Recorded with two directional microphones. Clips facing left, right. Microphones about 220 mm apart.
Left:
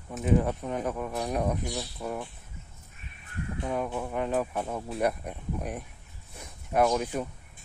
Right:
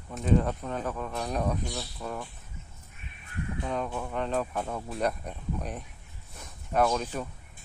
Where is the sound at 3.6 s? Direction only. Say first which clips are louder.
Left 3 dB; 10° left (ahead or behind).